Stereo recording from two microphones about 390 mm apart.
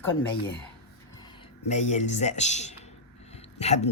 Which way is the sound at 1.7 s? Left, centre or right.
Centre.